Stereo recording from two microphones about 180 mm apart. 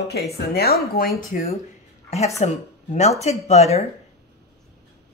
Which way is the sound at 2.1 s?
35° left (ahead or behind).